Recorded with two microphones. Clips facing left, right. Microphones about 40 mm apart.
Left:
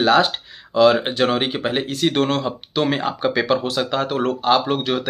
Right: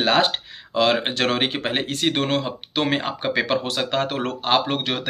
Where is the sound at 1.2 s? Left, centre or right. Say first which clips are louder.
Left 3 dB; right.